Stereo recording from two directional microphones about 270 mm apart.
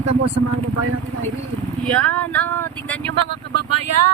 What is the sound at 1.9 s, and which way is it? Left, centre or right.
Speech, centre.